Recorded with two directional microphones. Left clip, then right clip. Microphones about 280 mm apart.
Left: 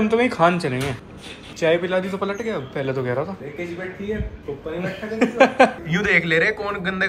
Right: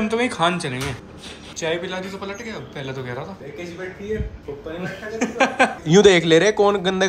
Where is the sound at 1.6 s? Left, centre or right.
Right.